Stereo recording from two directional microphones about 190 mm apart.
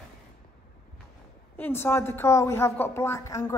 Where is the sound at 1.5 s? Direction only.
10° left (ahead or behind).